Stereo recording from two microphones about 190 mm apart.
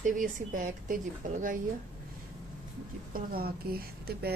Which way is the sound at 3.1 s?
50° right (ahead or behind).